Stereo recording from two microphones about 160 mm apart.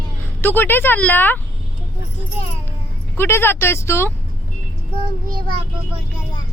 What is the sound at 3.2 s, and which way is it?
Speech, 15° left (ahead or behind).